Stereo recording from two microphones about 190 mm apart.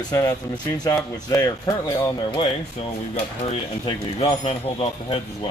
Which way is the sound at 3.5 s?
30° left (ahead or behind).